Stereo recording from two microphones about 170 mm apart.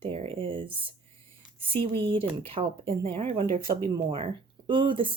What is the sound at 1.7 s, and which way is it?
Speech, 30° right (ahead or behind).